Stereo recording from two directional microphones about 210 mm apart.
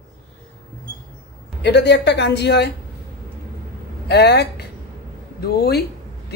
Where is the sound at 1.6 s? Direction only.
55° left (ahead or behind).